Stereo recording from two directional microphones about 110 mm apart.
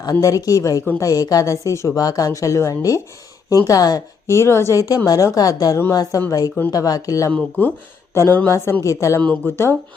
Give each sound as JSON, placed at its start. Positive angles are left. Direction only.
{"t": 0.0, "sound": "a woman's voice", "side_deg": 30}
{"t": 7.3, "sound": "a woman's voice", "side_deg": 15}
{"t": 9.3, "sound": "a woman's voice", "side_deg": 20}